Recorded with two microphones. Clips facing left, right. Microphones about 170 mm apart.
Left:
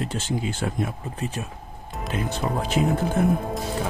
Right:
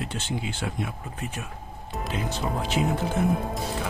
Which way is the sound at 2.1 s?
50° left (ahead or behind).